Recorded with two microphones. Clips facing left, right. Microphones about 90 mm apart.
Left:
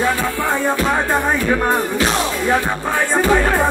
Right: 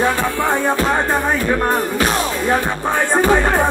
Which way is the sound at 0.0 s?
20° right (ahead or behind).